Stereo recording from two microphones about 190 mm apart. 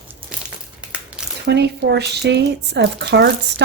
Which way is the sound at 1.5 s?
60° right (ahead or behind).